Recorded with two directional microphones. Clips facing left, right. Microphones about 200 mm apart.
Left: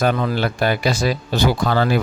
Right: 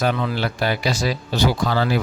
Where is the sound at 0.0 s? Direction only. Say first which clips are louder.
Left 3 dB; 45° left (ahead or behind).